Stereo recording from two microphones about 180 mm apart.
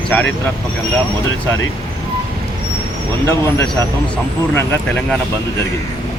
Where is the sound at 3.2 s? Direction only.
15° left (ahead or behind).